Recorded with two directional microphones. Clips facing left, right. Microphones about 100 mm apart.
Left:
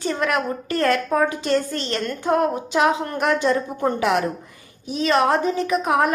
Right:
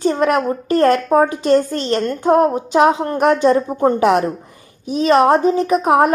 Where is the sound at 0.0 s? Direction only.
35° right (ahead or behind).